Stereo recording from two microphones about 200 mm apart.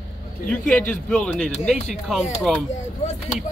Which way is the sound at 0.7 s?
5° left (ahead or behind).